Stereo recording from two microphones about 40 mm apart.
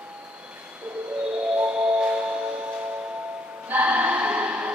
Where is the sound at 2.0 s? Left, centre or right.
Right.